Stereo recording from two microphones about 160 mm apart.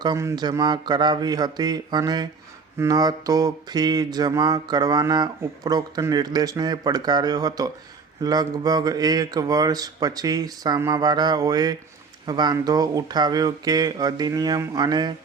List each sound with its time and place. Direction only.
0.0 s mantra: 20° right (ahead or behind)